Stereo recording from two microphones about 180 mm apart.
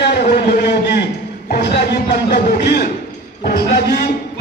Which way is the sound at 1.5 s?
65° left (ahead or behind).